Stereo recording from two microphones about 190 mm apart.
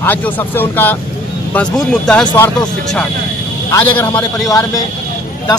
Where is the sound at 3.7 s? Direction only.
10° left (ahead or behind).